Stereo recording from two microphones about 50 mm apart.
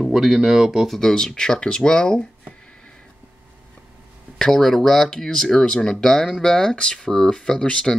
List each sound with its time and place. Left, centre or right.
0.1 s speech: centre
4.4 s speech: centre